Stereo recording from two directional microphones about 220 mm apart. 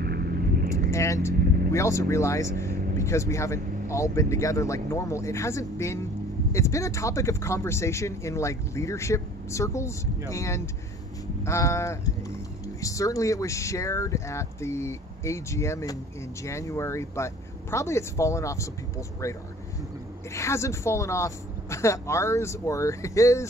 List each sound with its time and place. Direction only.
0.0 s vehicle: 45° right (ahead or behind)
0.9 s speech: 15° left (ahead or behind)
20.3 s speech: 15° left (ahead or behind)